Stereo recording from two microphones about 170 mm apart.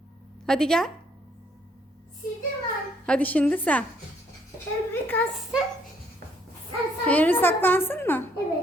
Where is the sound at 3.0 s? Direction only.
5° left (ahead or behind).